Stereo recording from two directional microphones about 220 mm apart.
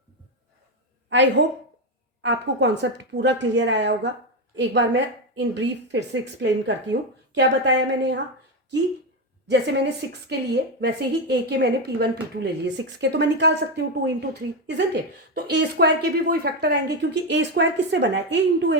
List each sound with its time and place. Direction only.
1.1 s a woman's voice: 55° right (ahead or behind)
9.5 s a woman's voice: 50° right (ahead or behind)